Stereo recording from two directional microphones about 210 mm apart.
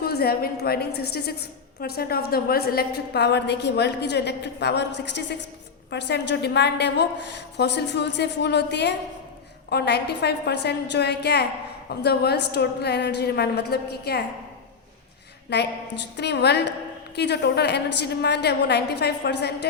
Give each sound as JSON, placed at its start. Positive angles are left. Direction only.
{"t": 0.0, "sound": "a woman's voice", "side_deg": 45}
{"t": 15.4, "sound": "a woman's voice", "side_deg": 55}